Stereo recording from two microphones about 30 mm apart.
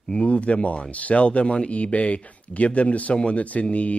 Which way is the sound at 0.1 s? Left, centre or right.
Left.